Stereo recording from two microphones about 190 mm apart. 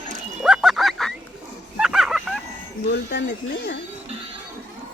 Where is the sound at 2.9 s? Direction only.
60° left (ahead or behind).